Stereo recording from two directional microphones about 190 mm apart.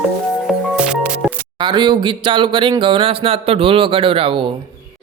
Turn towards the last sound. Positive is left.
turn(degrees=-30)  # may be behind; listen again after turning